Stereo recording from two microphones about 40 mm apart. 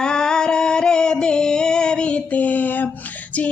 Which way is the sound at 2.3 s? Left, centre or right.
Left.